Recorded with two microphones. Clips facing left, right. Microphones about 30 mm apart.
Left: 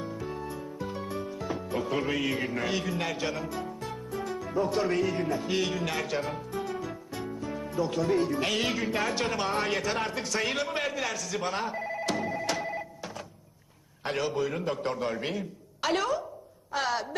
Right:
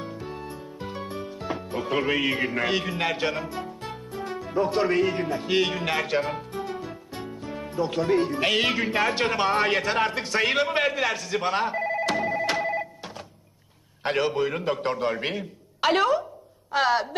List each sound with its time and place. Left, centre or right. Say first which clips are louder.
0.0 s music: even; right
2.4 s speech: right 5 dB; right
3.8 s music: right 1 dB; right
7.3 s speech: right 2 dB; right
12.2 s telephone bell ringing: right 6 dB; right
14.0 s speech: right 5 dB; right